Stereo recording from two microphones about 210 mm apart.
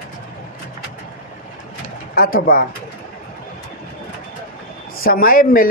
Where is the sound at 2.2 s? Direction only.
45° left (ahead or behind).